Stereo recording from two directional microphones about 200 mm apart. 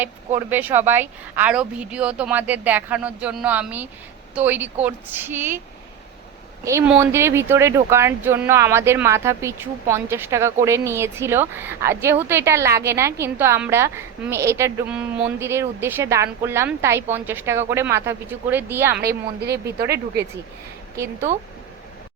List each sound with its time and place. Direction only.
0.3 s a woman's voice: 10° right (ahead or behind)
6.7 s a woman's voice: 10° right (ahead or behind)
19.0 s a woman's voice: 55° right (ahead or behind)
20.9 s a woman's voice: 15° right (ahead or behind)